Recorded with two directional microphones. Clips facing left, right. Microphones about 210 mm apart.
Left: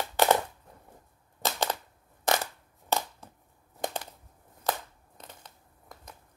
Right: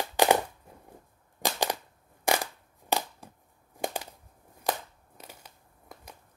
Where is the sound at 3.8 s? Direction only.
10° right (ahead or behind).